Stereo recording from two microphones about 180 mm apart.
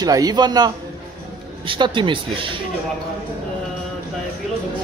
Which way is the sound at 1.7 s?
25° right (ahead or behind).